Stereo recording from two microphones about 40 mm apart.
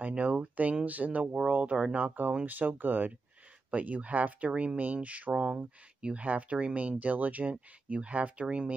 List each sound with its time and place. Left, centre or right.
0.0 s speech: right
3.7 s speech: right
4.5 s speech: right
4.7 s speech: right
5.3 s speech: right
6.2 s speech: right